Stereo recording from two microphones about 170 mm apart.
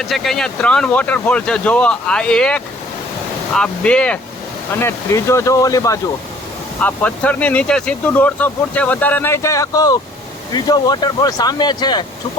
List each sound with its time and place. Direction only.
0.0 s speech: centre (ahead or behind); by 6.0 s 20° left (ahead or behind)
6.8 s speech: 10° left (ahead or behind); by 12.0 s 25° left (ahead or behind)